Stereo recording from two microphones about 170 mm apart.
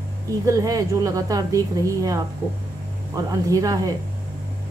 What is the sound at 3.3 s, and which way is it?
Speech, 20° right (ahead or behind).